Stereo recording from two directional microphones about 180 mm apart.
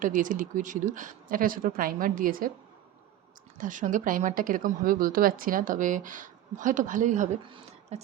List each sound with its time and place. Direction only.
0.0 s a woman's voice: 45° right (ahead or behind)
3.6 s a woman's voice: 45° right (ahead or behind)
7.5 s a sound: 35° right (ahead or behind)